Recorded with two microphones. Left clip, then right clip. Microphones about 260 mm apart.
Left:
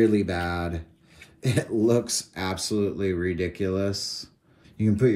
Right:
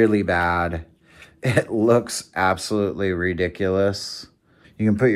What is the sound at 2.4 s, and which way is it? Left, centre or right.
Speech, centre.